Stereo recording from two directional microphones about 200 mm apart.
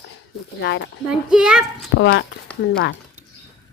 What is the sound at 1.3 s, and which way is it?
Speech, 5° right (ahead or behind).